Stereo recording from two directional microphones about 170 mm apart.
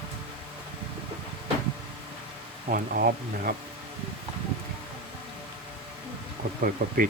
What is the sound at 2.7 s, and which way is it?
Speech, 65° right (ahead or behind).